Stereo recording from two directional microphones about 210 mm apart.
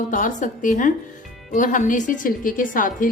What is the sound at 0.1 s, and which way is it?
Music, 40° left (ahead or behind).